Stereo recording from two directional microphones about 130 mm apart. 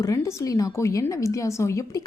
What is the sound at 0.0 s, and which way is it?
A woman's voice, 20° left (ahead or behind).